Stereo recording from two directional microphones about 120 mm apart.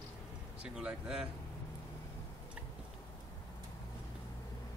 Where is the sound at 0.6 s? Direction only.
10° right (ahead or behind).